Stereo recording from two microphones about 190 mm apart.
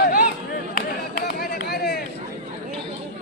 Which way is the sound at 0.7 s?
50° left (ahead or behind).